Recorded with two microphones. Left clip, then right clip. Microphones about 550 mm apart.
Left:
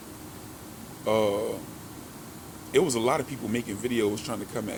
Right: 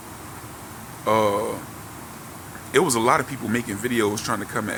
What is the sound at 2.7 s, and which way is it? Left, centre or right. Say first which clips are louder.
Speech: right 5 dB; left.